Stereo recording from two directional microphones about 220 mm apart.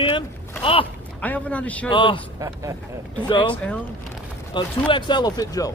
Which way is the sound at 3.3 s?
20° left (ahead or behind).